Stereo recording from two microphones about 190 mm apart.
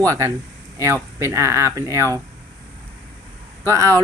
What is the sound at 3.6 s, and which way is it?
Speech, 15° right (ahead or behind).